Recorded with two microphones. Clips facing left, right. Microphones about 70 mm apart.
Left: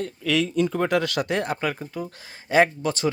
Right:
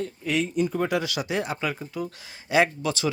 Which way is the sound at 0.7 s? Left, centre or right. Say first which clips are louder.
Left 3 dB; left.